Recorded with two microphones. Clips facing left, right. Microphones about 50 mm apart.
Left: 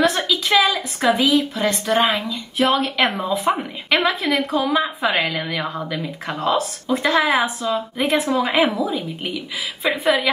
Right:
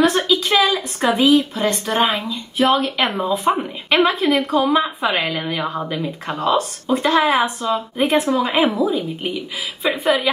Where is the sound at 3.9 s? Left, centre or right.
Right.